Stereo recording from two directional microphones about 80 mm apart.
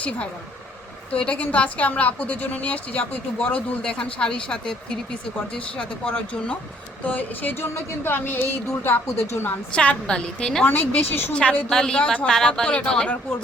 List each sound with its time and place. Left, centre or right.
1.2 s a woman's voice: centre; by 9.5 s left
9.7 s a woman's voice: centre
10.7 s a woman's voice: left
11.3 s a woman's voice: centre